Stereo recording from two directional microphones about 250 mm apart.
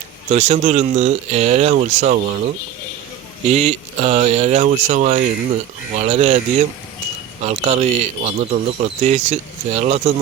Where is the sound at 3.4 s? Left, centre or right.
Right.